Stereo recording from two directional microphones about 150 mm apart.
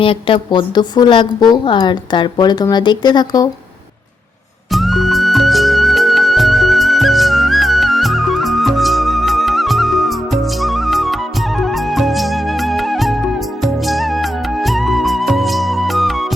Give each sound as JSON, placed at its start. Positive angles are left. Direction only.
{"t": 0.0, "sound": "a woman's voice", "side_deg": 35}
{"t": 4.7, "sound": "music", "side_deg": 0}